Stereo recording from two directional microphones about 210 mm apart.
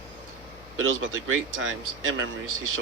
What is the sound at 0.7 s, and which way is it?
Speech, 75° right (ahead or behind).